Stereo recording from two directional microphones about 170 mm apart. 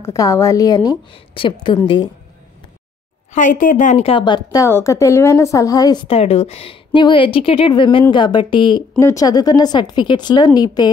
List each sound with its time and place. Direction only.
0.0 s a woman's voice: 20° left (ahead or behind)
3.3 s a woman's voice: 50° left (ahead or behind); by 5.9 s 20° left (ahead or behind)
6.0 s a woman's voice: 35° left (ahead or behind)